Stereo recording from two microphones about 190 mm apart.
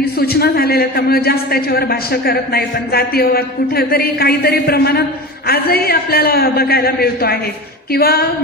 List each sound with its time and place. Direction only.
0.2 s a man's voice: 55° left (ahead or behind)